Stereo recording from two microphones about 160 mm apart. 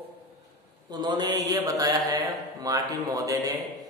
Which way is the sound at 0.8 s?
25° right (ahead or behind).